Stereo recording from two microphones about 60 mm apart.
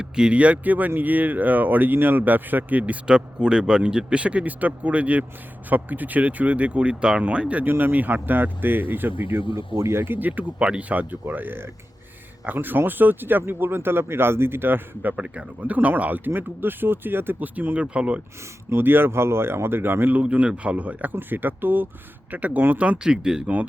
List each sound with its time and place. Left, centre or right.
0.0 s speech: centre
7.6 s speech: right
9.7 s speech: right
15.1 s speech: right
18.7 s speech: right
20.2 s speech: right